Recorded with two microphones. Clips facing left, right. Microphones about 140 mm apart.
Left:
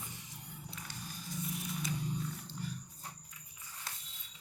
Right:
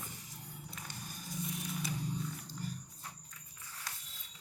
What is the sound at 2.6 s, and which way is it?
Wild animals, 40° right (ahead or behind).